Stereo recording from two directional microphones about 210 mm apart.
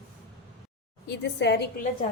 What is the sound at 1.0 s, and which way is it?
Speech, 55° left (ahead or behind).